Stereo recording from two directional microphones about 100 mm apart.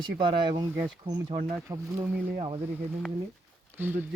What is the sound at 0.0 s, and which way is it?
Speech, 50° right (ahead or behind).